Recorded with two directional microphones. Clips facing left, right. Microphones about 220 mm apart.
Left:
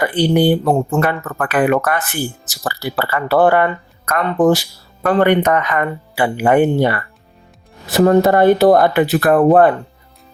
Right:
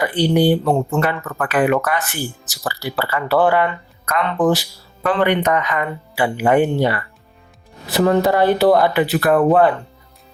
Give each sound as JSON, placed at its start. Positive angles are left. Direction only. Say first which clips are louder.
{"t": 0.0, "sound": "speech", "louder": "left 2 dB", "side_deg": 50}